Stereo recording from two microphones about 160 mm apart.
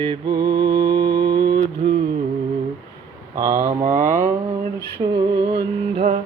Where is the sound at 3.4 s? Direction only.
20° right (ahead or behind).